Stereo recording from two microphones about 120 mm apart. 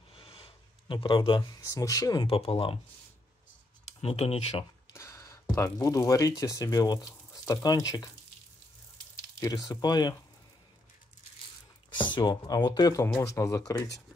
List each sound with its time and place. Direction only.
0.1 s a sound: 50° left (ahead or behind)
1.5 s speech: 30° left (ahead or behind)
2.2 s speech: 50° left (ahead or behind)
4.0 s speech: 55° left (ahead or behind)
4.9 s speech: 25° left (ahead or behind)
9.1 s speech: 30° left (ahead or behind)
12.1 s speech: 40° left (ahead or behind)